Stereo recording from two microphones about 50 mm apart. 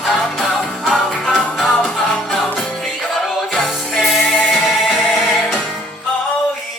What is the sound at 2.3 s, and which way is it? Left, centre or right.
Music, centre.